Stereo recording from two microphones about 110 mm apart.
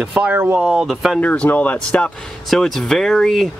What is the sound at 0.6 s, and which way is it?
Speech, 5° right (ahead or behind).